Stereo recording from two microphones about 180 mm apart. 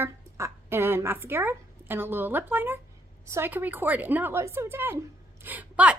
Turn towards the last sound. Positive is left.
turn(degrees=-10)  # may be behind; listen again after turning